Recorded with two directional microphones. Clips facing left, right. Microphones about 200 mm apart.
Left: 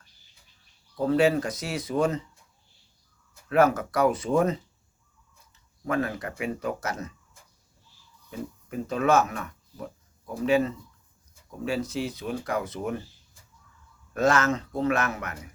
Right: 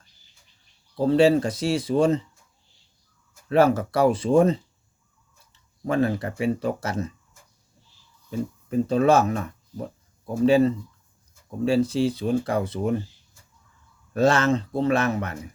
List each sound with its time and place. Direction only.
0.9 s speech: 30° right (ahead or behind)
3.5 s speech: 30° right (ahead or behind)
5.8 s speech: 30° right (ahead or behind)
8.3 s speech: 30° right (ahead or behind)
14.1 s a man's voice: 30° right (ahead or behind)